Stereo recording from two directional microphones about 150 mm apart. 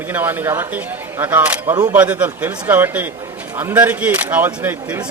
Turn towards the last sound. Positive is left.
turn(degrees=-10)  # may be behind; listen again after turning